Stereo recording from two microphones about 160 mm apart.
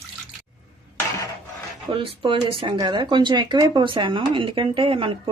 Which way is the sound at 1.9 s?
35° right (ahead or behind).